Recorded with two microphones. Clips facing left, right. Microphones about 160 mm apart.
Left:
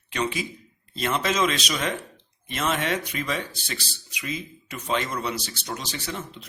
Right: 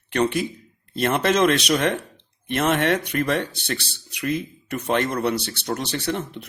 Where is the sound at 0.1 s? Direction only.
60° right (ahead or behind).